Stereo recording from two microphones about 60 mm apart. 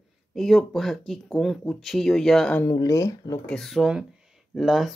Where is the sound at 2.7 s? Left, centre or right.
Left.